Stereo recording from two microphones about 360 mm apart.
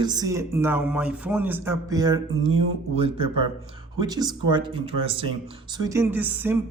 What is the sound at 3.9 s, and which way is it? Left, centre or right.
Speech, centre.